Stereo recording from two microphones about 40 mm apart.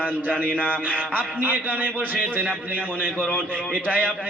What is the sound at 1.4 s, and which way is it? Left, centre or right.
A man's voice, right.